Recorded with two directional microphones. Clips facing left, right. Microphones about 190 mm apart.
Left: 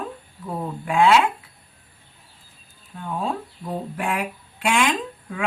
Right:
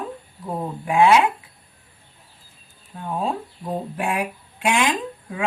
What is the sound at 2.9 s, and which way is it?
Speech, 25° right (ahead or behind).